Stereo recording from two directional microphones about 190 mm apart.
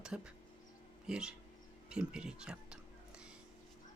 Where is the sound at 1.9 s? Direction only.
5° right (ahead or behind).